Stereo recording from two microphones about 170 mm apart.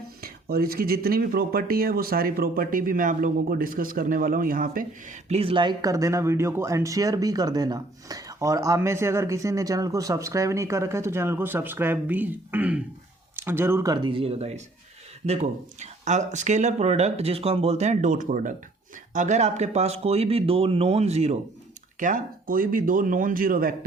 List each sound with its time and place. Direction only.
0.2 s speech: 65° right (ahead or behind)
5.3 s speech: 35° right (ahead or behind)
21.9 s speech: 50° right (ahead or behind)